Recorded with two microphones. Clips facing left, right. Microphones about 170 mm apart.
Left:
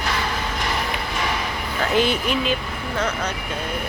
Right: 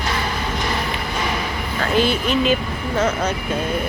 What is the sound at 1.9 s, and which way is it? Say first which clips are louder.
Speech: right 2 dB; 20° left (ahead or behind).